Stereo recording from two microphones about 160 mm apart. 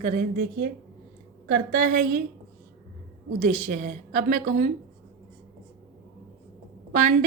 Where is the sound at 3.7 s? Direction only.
45° right (ahead or behind).